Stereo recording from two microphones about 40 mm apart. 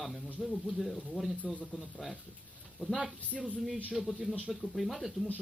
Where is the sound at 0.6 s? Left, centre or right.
Centre.